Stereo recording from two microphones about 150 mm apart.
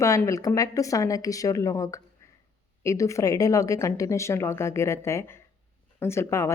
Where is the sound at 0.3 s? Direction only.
25° left (ahead or behind).